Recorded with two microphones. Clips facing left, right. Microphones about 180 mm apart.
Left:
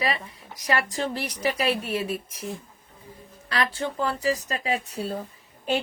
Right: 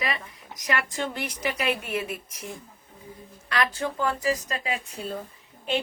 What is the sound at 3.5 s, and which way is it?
Speech, 30° left (ahead or behind).